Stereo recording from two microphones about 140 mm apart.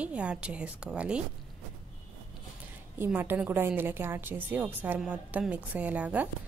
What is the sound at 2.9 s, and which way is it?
A woman's voice, 15° right (ahead or behind).